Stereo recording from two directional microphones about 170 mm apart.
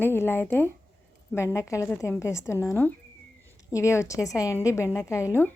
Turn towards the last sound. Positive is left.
turn(degrees=15)  # may be behind; listen again after turning